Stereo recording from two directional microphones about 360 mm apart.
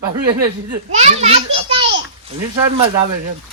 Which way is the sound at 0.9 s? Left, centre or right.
Centre.